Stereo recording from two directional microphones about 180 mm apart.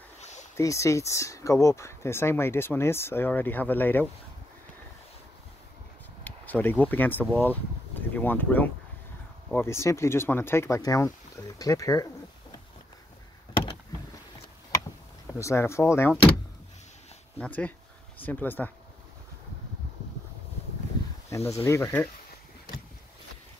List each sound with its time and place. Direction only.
0.6 s speech: 15° left (ahead or behind)
6.2 s speech: 10° left (ahead or behind)
15.3 s speech: 15° left (ahead or behind)
17.4 s speech: 10° left (ahead or behind)
21.5 s speech: 15° left (ahead or behind)